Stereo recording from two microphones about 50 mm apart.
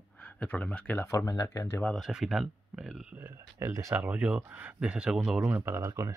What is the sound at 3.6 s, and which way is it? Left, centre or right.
Speech, right.